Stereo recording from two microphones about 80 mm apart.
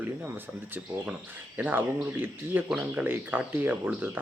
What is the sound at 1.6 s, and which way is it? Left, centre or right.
Speech, right.